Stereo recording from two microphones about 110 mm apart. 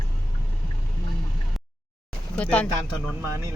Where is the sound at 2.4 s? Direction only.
10° left (ahead or behind).